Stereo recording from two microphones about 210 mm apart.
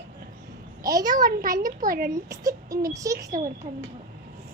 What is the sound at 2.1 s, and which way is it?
A child's voice, 15° right (ahead or behind).